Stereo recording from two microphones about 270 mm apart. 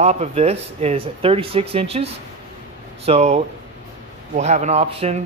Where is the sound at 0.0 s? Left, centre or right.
Right.